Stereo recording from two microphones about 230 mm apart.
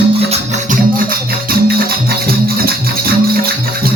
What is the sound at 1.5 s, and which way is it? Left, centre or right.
Music, right.